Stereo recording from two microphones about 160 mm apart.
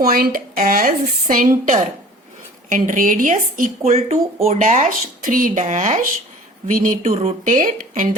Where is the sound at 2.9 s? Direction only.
55° right (ahead or behind).